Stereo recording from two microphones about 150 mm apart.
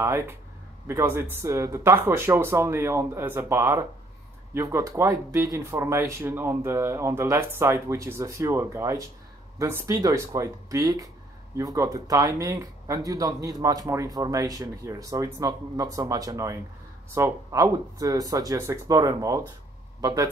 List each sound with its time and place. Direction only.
0.0 s speech: 20° right (ahead or behind)